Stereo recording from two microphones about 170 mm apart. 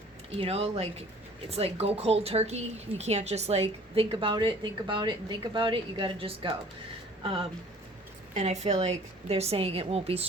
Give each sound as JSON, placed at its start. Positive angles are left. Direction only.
{"t": 0.3, "sound": "a woman's voice", "side_deg": -35}
{"t": 4.1, "sound": "a woman's voice", "side_deg": -30}